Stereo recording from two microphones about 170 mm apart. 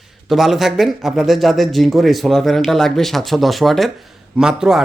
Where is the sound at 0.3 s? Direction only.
Centre (ahead or behind).